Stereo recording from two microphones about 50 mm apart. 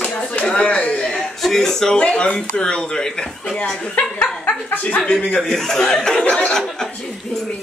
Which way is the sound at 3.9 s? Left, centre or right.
Left.